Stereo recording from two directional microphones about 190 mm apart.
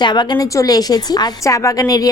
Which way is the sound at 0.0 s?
25° left (ahead or behind).